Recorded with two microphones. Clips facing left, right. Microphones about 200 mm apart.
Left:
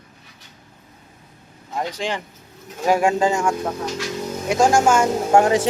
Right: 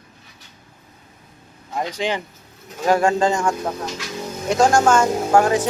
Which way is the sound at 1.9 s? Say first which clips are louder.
Right 5 dB; centre (ahead or behind).